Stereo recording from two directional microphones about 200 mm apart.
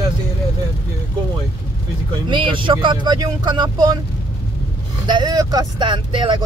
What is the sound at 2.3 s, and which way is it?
Speech, 25° right (ahead or behind).